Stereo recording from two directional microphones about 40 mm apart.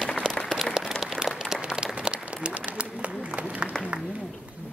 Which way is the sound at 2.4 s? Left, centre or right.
Right.